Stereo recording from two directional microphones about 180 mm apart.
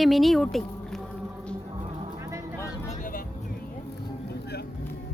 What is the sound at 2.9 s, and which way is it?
Vehicle, 50° left (ahead or behind).